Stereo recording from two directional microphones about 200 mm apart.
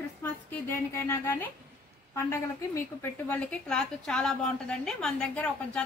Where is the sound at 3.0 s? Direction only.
5° left (ahead or behind).